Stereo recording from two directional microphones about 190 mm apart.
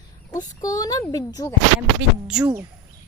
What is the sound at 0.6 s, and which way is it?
Speech, 20° left (ahead or behind).